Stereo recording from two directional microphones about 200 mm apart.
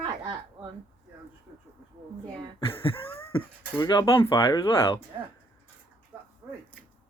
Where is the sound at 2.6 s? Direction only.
25° left (ahead or behind).